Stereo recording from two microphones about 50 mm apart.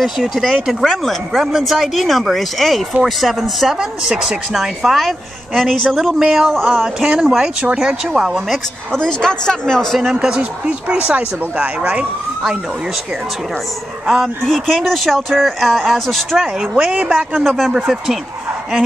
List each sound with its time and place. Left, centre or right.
0.0 s speech: centre
5.9 s speech: centre
8.9 s a man's voice: centre
10.1 s speech: centre
14.0 s speech: centre
16.5 s speech: centre
17.4 s speech: centre